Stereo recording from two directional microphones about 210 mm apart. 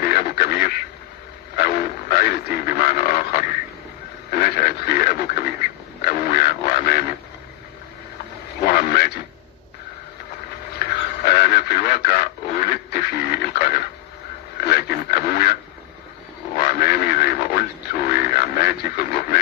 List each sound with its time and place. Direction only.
0.0 s quack: 45° left (ahead or behind)
1.6 s radio: 40° left (ahead or behind)
4.3 s a sound: 45° left (ahead or behind)
8.6 s radio: 40° left (ahead or behind)
10.8 s radio: 40° left (ahead or behind)
16.5 s radio: 40° left (ahead or behind)